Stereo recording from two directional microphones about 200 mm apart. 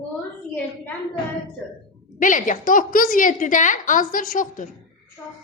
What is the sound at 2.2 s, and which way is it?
A woman's voice, 40° left (ahead or behind).